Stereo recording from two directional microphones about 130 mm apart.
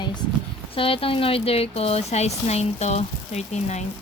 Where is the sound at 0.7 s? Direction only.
45° left (ahead or behind).